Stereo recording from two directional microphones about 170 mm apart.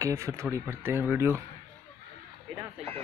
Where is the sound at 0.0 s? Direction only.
15° right (ahead or behind).